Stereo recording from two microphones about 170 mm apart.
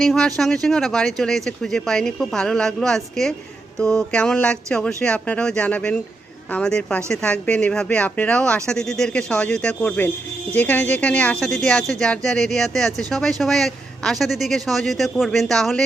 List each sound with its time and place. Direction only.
0.0 s speech: centre (ahead or behind)